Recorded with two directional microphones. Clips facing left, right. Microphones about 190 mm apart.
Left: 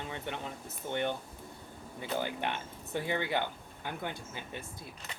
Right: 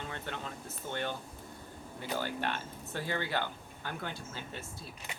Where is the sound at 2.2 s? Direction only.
15° left (ahead or behind).